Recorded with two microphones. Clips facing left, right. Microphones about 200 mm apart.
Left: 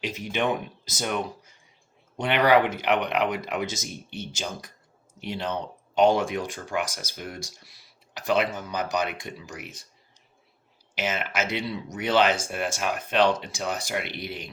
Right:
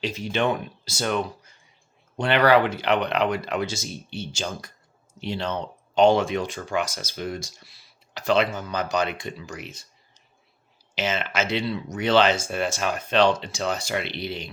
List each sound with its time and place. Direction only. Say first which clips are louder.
0.3 s speech: right 2 dB; 15° left (ahead or behind)
10.9 s speech: right 2 dB; 10° left (ahead or behind)